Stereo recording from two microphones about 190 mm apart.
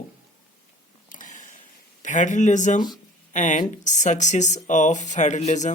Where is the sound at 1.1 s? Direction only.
40° left (ahead or behind).